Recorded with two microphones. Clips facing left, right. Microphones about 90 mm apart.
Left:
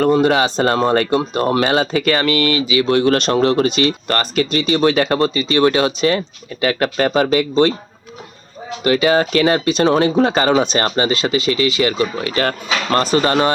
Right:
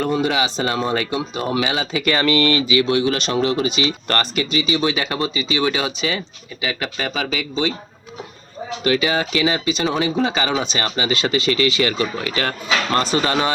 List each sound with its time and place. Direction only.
0.0 s speech: 45° left (ahead or behind)
2.4 s speech: 20° left (ahead or behind)
2.8 s speech: 45° left (ahead or behind)
8.8 s speech: 35° left (ahead or behind)
11.2 s speech: 25° left (ahead or behind)
12.2 s speech: 40° left (ahead or behind)